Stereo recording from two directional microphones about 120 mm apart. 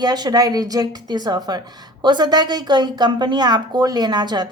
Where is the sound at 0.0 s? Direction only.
35° right (ahead or behind).